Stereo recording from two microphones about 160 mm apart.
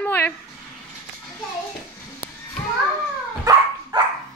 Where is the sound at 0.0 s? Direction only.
10° left (ahead or behind).